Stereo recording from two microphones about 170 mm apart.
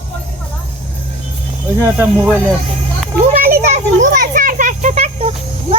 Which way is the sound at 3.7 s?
50° right (ahead or behind).